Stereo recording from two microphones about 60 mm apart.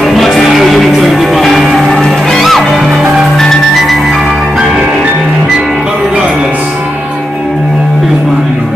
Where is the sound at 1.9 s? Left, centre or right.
Centre.